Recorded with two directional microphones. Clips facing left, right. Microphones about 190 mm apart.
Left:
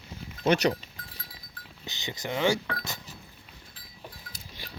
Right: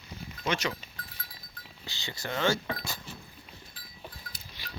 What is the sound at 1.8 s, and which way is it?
Speech, 20° left (ahead or behind).